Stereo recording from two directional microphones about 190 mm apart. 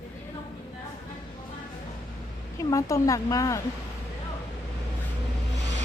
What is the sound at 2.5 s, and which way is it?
Speech, 15° left (ahead or behind).